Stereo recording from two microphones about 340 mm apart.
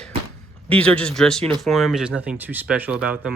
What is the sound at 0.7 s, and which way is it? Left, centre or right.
Speech, centre.